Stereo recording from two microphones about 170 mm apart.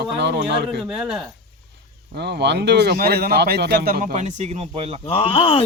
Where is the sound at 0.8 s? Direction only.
5° right (ahead or behind).